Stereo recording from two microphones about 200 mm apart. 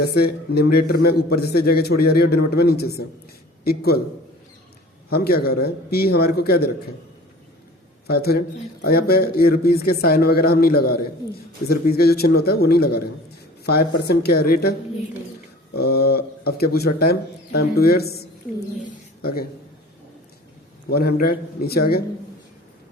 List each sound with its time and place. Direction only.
0.1 s speech: 50° left (ahead or behind)
5.0 s speech: 50° left (ahead or behind)
8.0 s speech: 50° left (ahead or behind)
20.9 s speech: 50° left (ahead or behind)